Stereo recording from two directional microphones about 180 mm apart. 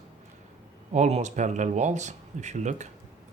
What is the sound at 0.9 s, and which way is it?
Speech, 40° right (ahead or behind).